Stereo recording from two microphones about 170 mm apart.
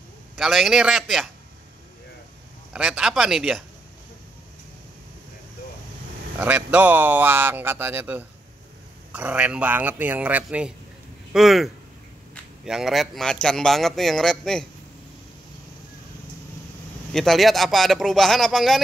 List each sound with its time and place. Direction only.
0.4 s a man's voice: centre (ahead or behind)
2.7 s a man's voice: 5° right (ahead or behind)
6.3 s a man's voice: 10° right (ahead or behind)
17.1 s a man's voice: centre (ahead or behind)